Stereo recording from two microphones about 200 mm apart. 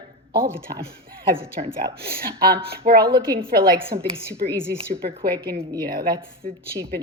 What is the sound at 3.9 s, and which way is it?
Speech, 45° right (ahead or behind).